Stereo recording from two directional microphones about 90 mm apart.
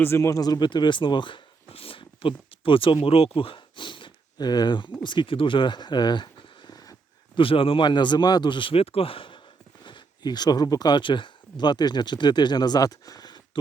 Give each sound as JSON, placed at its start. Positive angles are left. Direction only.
{"t": 0.0, "sound": "speech", "side_deg": 30}
{"t": 7.3, "sound": "speech", "side_deg": 85}
{"t": 9.8, "sound": "speech", "side_deg": 55}